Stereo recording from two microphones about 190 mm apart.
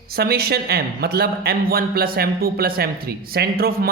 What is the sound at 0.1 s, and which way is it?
A man's voice, 55° right (ahead or behind).